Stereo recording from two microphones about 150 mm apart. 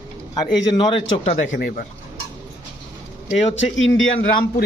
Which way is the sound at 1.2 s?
55° left (ahead or behind).